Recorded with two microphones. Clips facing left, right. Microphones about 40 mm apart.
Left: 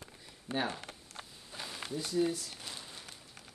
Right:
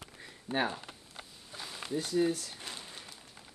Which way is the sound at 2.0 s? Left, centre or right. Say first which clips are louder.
Right 2 dB; right.